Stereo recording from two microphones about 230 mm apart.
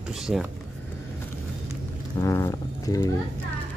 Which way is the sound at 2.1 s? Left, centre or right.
Centre.